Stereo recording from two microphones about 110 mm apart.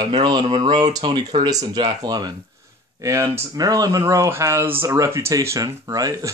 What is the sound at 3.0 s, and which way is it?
Speech, 25° right (ahead or behind).